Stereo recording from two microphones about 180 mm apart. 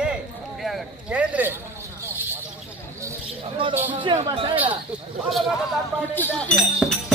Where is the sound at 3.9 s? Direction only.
30° right (ahead or behind).